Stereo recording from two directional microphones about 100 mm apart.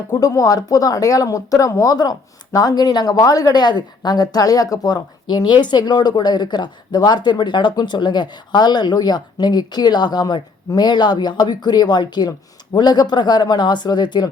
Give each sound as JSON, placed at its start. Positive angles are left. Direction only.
{"t": 0.1, "sound": "speech", "side_deg": 35}